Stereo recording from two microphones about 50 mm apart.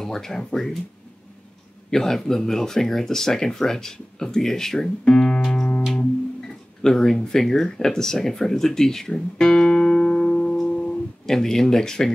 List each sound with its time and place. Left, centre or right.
0.0 s speech: centre
1.9 s speech: centre
5.9 s music: centre
6.9 s speech: centre
9.1 s guitar: centre
10.6 s music: centre